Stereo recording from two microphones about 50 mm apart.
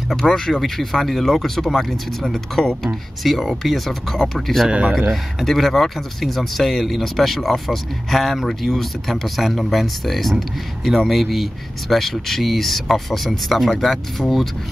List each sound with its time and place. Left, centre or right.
0.1 s speech: centre
4.6 s a man's voice: right
5.1 s speech: centre